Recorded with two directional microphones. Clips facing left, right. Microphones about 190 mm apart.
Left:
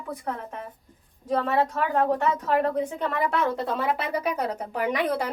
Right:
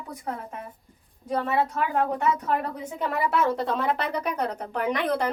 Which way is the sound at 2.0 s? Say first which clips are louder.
Left 1 dB; 35° left (ahead or behind).